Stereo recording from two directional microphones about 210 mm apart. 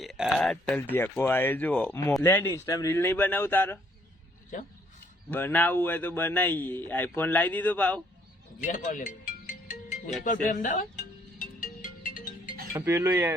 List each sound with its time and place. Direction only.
0.0 s speech: centre (ahead or behind)
4.5 s speech: 35° left (ahead or behind)
5.3 s speech: 10° left (ahead or behind)
8.6 s music: 40° left (ahead or behind)
10.2 s speech: 40° left (ahead or behind)
11.3 s music: 40° left (ahead or behind)
12.7 s cutlery: 10° right (ahead or behind)